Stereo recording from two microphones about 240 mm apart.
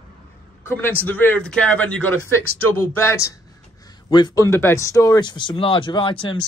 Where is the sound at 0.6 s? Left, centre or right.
Centre.